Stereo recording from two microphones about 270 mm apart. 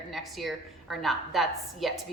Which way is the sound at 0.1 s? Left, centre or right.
Centre.